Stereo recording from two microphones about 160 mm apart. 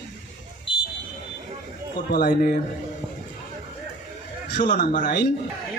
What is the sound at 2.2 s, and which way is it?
Speech, 65° left (ahead or behind).